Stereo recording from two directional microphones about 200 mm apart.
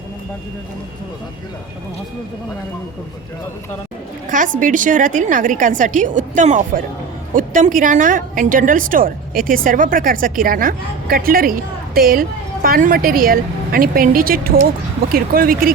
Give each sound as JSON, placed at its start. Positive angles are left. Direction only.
{"t": 4.3, "sound": "a woman's voice", "side_deg": -40}